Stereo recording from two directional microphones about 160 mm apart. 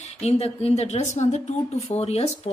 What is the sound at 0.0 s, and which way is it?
A woman's voice, 45° left (ahead or behind).